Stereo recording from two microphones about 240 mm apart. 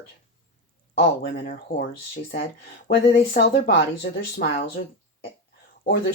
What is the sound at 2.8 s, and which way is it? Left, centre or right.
Speech, left.